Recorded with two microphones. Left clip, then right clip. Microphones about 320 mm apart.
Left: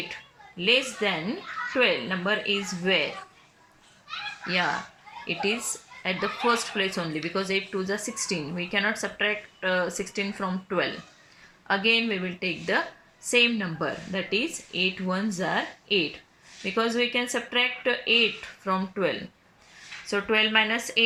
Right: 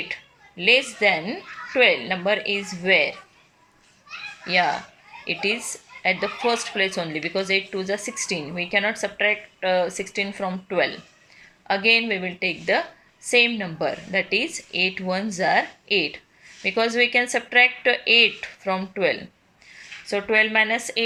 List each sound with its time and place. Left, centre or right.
0.6 s speech: centre
4.4 s a woman's voice: centre